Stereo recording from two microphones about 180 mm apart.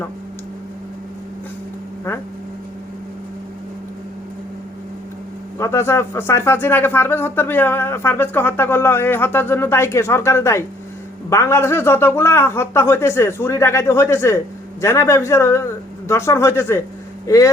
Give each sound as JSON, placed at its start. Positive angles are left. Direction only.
{"t": 5.5, "sound": "a man's voice", "side_deg": 15}